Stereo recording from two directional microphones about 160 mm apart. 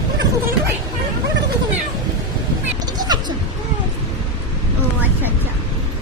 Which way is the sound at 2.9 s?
25° right (ahead or behind).